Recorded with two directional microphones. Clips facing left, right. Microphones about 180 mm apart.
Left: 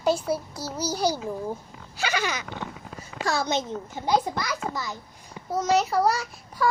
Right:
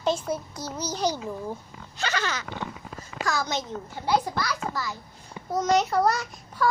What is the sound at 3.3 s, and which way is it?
A child's voice, 25° left (ahead or behind).